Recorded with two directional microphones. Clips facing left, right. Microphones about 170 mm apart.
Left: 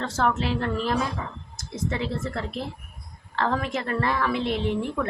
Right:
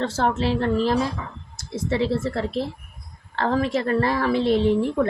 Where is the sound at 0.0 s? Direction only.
30° right (ahead or behind).